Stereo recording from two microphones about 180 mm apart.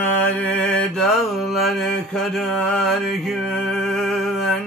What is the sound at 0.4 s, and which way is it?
Mantra, 5° left (ahead or behind).